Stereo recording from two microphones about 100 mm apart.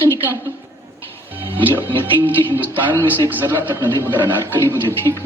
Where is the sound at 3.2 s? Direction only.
20° right (ahead or behind).